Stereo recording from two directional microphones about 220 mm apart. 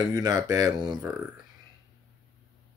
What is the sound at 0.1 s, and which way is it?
Speech, 15° right (ahead or behind).